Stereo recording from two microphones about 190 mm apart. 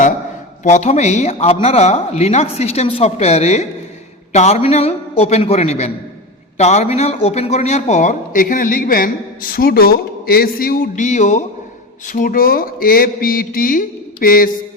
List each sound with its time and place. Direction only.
0.6 s a man's voice: 35° left (ahead or behind)
12.0 s mantra: 40° left (ahead or behind)